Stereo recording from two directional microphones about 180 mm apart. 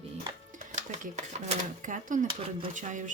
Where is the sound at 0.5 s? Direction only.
45° right (ahead or behind).